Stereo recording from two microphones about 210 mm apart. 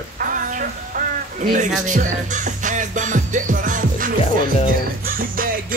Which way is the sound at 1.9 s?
35° right (ahead or behind).